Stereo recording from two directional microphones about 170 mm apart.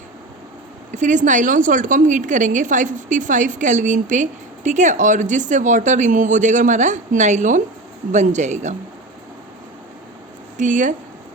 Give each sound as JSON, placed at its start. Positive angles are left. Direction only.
{"t": 0.9, "sound": "a woman's voice", "side_deg": -45}
{"t": 10.6, "sound": "a woman's voice", "side_deg": -50}